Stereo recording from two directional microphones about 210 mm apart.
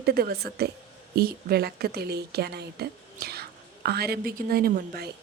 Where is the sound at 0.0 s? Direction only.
45° right (ahead or behind).